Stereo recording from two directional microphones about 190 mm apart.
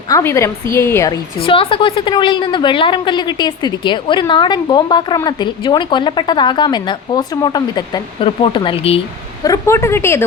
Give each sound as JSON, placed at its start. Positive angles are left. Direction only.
{"t": 0.1, "sound": "a woman's voice", "side_deg": 15}
{"t": 9.4, "sound": "speech", "side_deg": 15}